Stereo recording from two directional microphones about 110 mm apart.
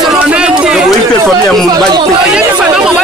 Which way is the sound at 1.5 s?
5° left (ahead or behind).